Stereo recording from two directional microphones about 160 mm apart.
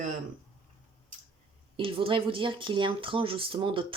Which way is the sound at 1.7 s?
35° right (ahead or behind).